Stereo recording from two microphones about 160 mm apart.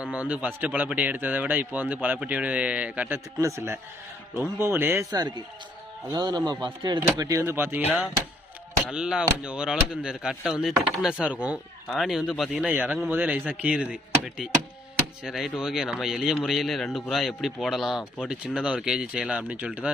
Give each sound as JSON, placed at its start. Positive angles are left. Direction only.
{"t": 0.0, "sound": "a man's voice", "side_deg": -10}
{"t": 6.1, "sound": "a man's voice", "side_deg": -25}
{"t": 8.9, "sound": "a man's voice", "side_deg": -5}